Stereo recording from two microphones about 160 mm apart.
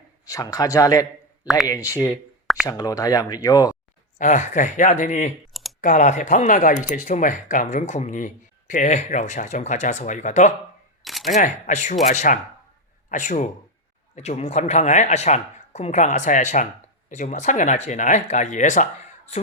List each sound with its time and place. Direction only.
0.3 s speech: 20° left (ahead or behind)
4.2 s speech: 50° left (ahead or behind)
11.0 s single-lens reflex camera: centre (ahead or behind)
11.3 s speech: 50° left (ahead or behind)